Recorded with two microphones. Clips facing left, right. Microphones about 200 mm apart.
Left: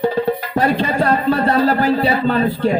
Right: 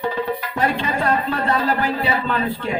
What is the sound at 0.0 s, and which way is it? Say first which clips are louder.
Music: left 6 dB; 35° left (ahead or behind).